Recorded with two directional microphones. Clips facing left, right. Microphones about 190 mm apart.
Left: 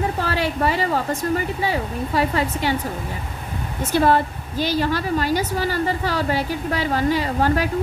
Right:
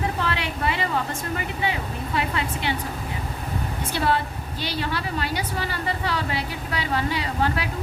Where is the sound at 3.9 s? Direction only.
45° left (ahead or behind).